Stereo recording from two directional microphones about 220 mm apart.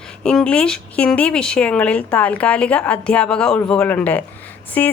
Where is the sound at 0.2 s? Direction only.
5° left (ahead or behind).